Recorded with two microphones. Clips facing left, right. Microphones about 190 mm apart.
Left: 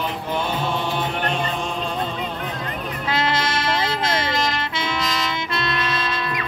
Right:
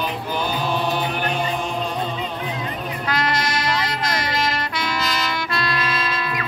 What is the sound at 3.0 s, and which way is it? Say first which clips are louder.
Music: left 1 dB; 25° left (ahead or behind).